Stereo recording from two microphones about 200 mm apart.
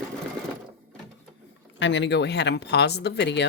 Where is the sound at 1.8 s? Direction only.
65° left (ahead or behind).